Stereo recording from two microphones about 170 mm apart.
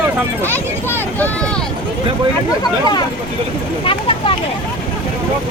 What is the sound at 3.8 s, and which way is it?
Speech, 30° left (ahead or behind).